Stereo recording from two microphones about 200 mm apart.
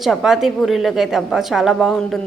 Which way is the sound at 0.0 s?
Centre (ahead or behind).